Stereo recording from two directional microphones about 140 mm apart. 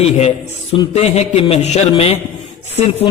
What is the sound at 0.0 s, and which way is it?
A man's voice, 45° left (ahead or behind).